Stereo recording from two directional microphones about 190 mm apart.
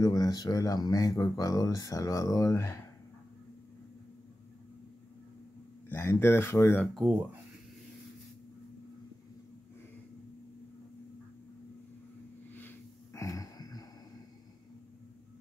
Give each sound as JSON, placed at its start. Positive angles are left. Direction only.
{"t": 0.0, "sound": "speech", "side_deg": 20}
{"t": 5.9, "sound": "speech", "side_deg": 10}
{"t": 6.8, "sound": "speech", "side_deg": 0}
{"t": 12.5, "sound": "a sound", "side_deg": 15}